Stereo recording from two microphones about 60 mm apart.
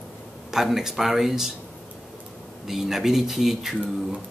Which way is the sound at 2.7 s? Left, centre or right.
Centre.